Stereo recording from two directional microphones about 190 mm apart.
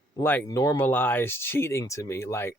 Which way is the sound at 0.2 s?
10° left (ahead or behind).